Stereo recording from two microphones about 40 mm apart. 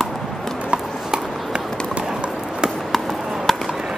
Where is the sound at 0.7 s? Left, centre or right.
Right.